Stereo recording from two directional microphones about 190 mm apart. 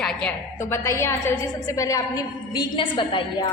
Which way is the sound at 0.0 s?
5° left (ahead or behind).